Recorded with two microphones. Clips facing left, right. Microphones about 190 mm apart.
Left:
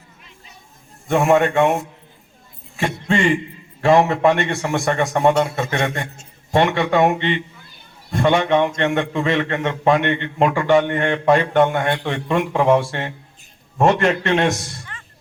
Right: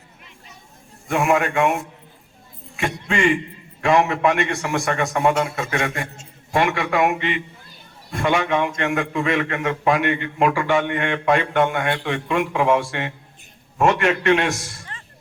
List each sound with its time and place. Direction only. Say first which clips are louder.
1.0 s a man's voice: left 4 dB; 35° left (ahead or behind)
2.7 s a man's voice: left 3 dB; 35° left (ahead or behind)